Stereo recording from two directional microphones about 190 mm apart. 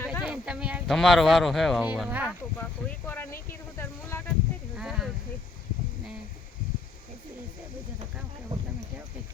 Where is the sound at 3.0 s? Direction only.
10° left (ahead or behind).